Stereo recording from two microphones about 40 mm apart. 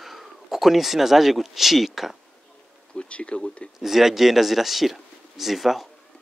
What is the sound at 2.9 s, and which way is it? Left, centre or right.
Speech, left.